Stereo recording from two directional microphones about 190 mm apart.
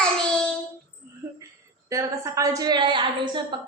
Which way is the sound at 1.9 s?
15° right (ahead or behind).